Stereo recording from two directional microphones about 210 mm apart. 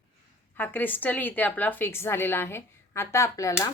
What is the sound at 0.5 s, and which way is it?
A woman's voice, 10° left (ahead or behind).